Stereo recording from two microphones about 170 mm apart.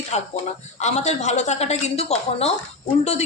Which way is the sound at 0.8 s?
40° left (ahead or behind).